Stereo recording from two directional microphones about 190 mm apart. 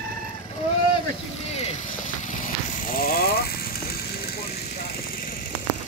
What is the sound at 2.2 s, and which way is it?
Vehicle, 45° left (ahead or behind).